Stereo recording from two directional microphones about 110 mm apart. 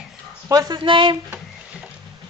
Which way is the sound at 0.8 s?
50° right (ahead or behind).